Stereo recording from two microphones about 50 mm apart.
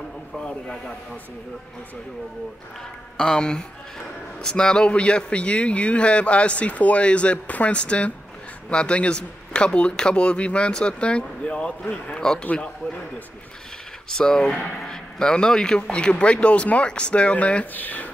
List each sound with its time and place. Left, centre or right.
0.4 s speech: centre
3.2 s speech: centre
14.0 s speech: centre; by 18.1 s left